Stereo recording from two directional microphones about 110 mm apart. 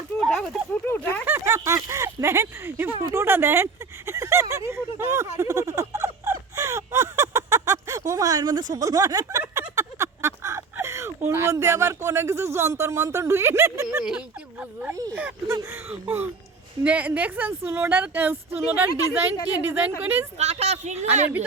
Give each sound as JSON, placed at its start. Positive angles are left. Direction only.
{"t": 0.2, "sound": "a sound", "side_deg": 0}
{"t": 0.9, "sound": "speech", "side_deg": 15}
{"t": 1.2, "sound": "speech", "side_deg": -20}
{"t": 5.4, "sound": "a sound", "side_deg": -30}
{"t": 11.3, "sound": "speech", "side_deg": -25}
{"t": 14.0, "sound": "a woman's voice", "side_deg": -10}
{"t": 15.4, "sound": "a woman's voice", "side_deg": -25}
{"t": 20.4, "sound": "a woman's voice", "side_deg": -85}